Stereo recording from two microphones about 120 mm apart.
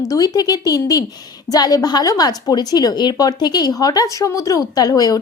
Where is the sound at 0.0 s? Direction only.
30° left (ahead or behind).